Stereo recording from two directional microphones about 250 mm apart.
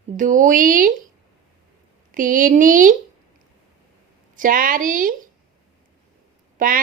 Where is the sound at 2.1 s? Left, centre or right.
Right.